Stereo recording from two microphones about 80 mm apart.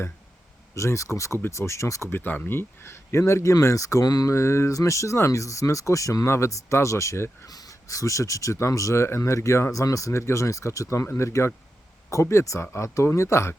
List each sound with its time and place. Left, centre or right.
0.8 s speech: left
4.4 s speech: left
10.1 s speech: left